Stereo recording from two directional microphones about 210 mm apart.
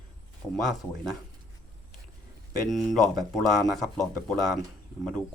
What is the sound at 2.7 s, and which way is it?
Speech, centre (ahead or behind).